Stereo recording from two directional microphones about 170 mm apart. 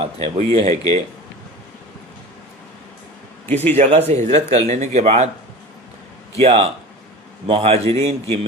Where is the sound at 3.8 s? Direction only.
40° right (ahead or behind).